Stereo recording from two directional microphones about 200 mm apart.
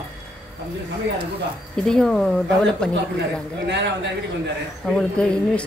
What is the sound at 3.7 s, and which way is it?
Speech, 60° right (ahead or behind).